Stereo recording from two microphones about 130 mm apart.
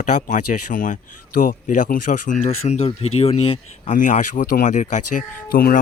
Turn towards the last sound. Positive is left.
turn(degrees=85)